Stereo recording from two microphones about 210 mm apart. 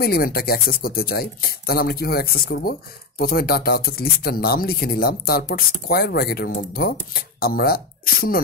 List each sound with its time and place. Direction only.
0.0 s speech: 45° left (ahead or behind)